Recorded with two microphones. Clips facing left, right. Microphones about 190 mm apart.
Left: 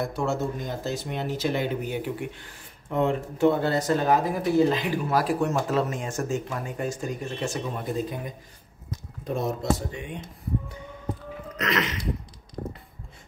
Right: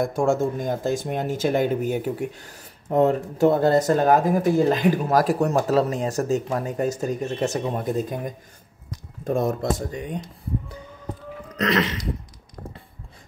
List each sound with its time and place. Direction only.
0.0 s speech: 50° right (ahead or behind)
11.5 s sneeze: 35° right (ahead or behind)